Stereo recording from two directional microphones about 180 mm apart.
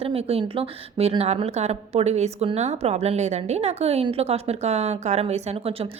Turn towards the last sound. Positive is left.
turn(degrees=-30)  # may be behind; listen again after turning